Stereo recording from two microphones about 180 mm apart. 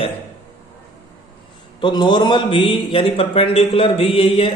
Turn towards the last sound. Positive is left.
turn(degrees=30)  # may be behind; listen again after turning